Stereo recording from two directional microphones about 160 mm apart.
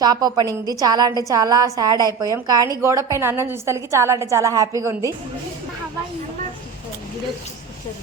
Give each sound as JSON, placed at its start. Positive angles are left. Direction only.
{"t": 0.0, "sound": "a woman's voice", "side_deg": -25}